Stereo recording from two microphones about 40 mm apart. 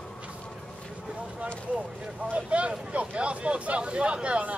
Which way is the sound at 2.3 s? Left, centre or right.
Right.